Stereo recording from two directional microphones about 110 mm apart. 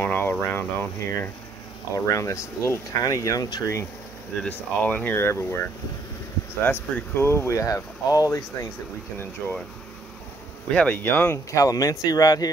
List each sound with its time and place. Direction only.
0.0 s speech: 20° left (ahead or behind); by 3.8 s 35° left (ahead or behind)
4.4 s speech: 15° left (ahead or behind)
6.6 s speech: 20° left (ahead or behind)
10.7 s speech: 10° left (ahead or behind)
11.0 s speech: 20° left (ahead or behind)
11.5 s speech: 35° left (ahead or behind)